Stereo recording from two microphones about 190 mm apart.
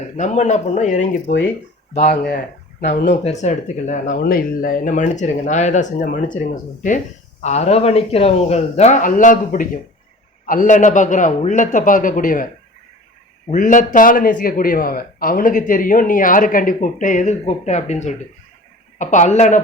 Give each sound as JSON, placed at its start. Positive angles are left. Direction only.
{"t": 0.2, "sound": "a man's voice", "side_deg": 40}
{"t": 13.5, "sound": "a man's voice", "side_deg": 45}